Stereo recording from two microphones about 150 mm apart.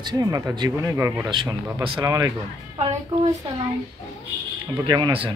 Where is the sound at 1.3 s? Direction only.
30° right (ahead or behind).